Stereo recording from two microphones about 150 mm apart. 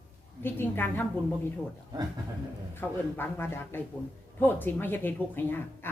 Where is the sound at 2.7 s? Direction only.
15° left (ahead or behind).